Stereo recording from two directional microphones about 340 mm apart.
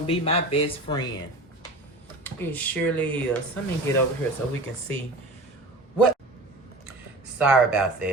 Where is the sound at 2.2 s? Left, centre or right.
Centre.